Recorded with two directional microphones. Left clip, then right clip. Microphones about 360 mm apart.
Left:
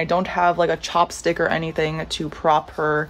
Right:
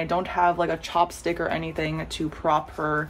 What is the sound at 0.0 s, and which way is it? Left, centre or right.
Speech, left.